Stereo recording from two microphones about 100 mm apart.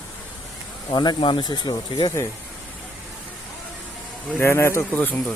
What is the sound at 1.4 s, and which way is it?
Speech, 45° left (ahead or behind).